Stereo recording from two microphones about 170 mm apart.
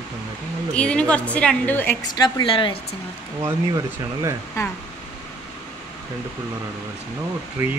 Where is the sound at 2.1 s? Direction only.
30° left (ahead or behind).